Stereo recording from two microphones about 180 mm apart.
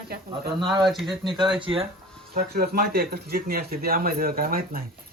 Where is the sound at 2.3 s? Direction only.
60° right (ahead or behind).